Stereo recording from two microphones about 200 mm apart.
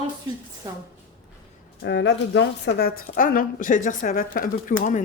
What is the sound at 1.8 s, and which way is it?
A woman's voice, 60° left (ahead or behind).